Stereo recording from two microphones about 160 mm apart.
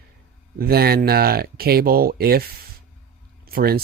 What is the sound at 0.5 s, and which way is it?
Speech, 70° right (ahead or behind).